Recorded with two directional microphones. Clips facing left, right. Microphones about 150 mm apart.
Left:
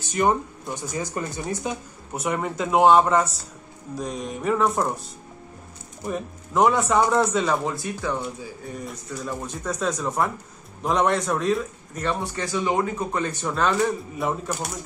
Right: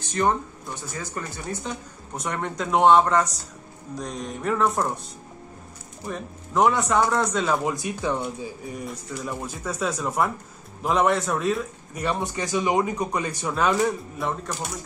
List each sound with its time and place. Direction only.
0.1 s speech: 10° left (ahead or behind)
6.0 s speech: 5° left (ahead or behind)
7.7 s a man's voice: 15° right (ahead or behind)
8.8 s a man's voice: 5° right (ahead or behind)
14.1 s speech: centre (ahead or behind)